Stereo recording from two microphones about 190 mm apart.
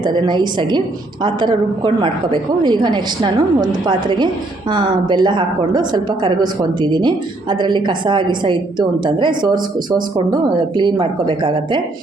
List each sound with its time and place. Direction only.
0.0 s a woman's voice: 25° right (ahead or behind)